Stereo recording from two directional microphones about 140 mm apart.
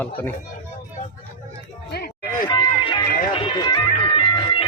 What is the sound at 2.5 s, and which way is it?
Music, 35° left (ahead or behind).